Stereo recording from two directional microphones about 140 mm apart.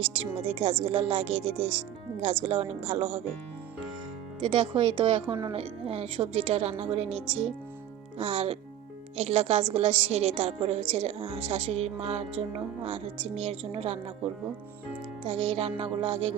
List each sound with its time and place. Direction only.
0.0 s a woman's voice: 45° right (ahead or behind)
4.4 s a woman's voice: 35° right (ahead or behind)
15.4 s a woman's voice: 45° right (ahead or behind)